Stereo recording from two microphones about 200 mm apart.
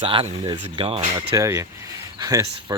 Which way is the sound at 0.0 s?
25° right (ahead or behind).